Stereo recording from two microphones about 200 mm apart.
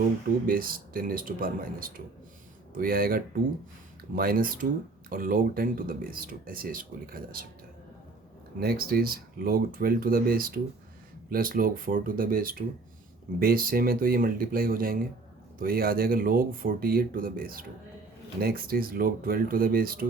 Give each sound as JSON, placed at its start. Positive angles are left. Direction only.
{"t": 0.4, "sound": "speech", "side_deg": -45}
{"t": 8.6, "sound": "speech", "side_deg": -50}